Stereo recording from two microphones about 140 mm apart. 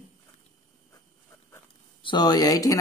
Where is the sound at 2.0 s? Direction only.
30° left (ahead or behind).